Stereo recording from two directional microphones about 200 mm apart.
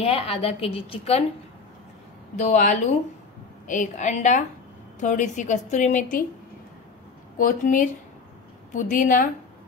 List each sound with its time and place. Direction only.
0.0 s a woman's voice: 30° left (ahead or behind)
2.3 s a woman's voice: 40° left (ahead or behind)
7.3 s a woman's voice: 40° left (ahead or behind)